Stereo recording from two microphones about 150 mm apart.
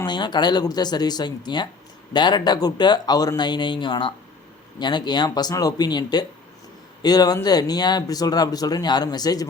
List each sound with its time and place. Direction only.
0.0 s speech: 30° left (ahead or behind)